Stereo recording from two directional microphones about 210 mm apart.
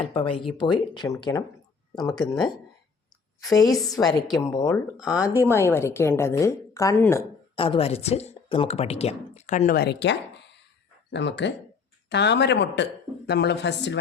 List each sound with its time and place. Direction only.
0.0 s speech: 25° left (ahead or behind)
3.4 s a woman's voice: 15° left (ahead or behind)
4.7 s speech: centre (ahead or behind)
5.1 s a woman's voice: 15° left (ahead or behind)
7.5 s a woman's voice: 25° left (ahead or behind); by 14.0 s 55° left (ahead or behind)